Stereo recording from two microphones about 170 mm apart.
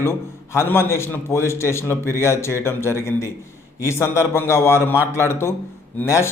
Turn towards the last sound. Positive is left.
turn(degrees=15)  # may be behind; listen again after turning